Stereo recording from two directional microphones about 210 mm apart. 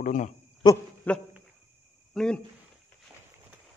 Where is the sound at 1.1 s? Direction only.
5° left (ahead or behind).